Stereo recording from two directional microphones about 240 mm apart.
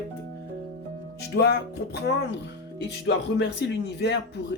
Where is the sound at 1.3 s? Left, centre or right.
Left.